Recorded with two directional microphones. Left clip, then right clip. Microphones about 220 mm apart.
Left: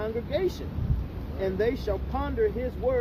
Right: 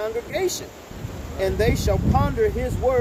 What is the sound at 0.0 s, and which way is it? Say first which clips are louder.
Speech: right 4 dB; 20° right (ahead or behind).